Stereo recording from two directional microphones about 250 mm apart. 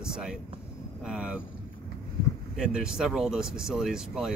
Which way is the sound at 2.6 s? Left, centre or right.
Centre.